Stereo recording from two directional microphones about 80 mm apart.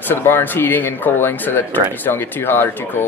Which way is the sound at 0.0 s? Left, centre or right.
Left.